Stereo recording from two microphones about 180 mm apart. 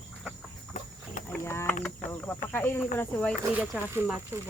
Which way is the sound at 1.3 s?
10° left (ahead or behind).